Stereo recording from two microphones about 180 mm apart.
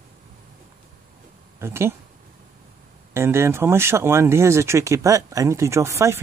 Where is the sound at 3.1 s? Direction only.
15° right (ahead or behind).